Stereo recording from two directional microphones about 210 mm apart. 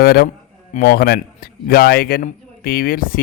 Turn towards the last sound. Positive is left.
turn(degrees=45)  # may be behind; listen again after turning